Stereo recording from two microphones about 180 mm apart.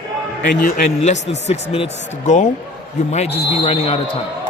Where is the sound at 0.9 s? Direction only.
40° left (ahead or behind).